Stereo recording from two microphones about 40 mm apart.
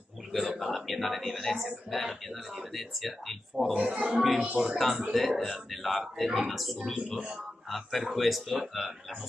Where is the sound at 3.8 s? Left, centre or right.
Right.